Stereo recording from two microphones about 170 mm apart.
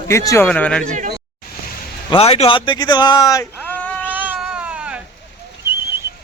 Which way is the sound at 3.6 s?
10° left (ahead or behind).